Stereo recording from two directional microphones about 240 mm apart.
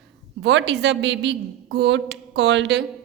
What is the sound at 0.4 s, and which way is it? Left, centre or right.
A woman's voice, right.